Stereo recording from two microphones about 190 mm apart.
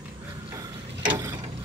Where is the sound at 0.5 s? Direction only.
20° right (ahead or behind).